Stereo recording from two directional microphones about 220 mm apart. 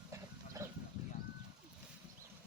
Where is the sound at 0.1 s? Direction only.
15° right (ahead or behind).